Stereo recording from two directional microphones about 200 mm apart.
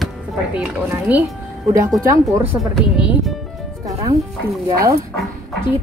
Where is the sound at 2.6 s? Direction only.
Centre (ahead or behind).